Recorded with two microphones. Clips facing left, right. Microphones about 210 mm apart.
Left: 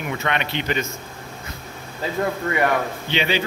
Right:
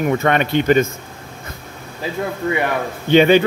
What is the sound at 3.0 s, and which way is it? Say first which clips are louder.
Speech: right 15 dB; 50° right (ahead or behind).